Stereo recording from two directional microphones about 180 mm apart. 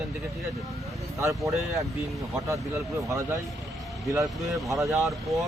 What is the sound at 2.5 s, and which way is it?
Speech, 15° right (ahead or behind).